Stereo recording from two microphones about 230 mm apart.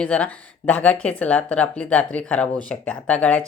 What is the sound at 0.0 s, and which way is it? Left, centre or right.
Speech, centre.